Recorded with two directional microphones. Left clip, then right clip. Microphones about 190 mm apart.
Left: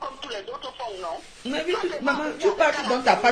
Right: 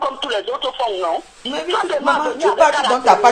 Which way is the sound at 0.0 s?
50° right (ahead or behind).